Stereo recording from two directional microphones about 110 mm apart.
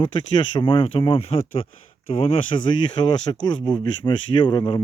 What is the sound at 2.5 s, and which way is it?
Speech, 50° left (ahead or behind).